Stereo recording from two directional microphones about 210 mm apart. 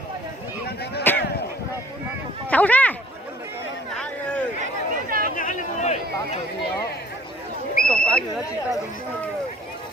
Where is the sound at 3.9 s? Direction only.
5° left (ahead or behind).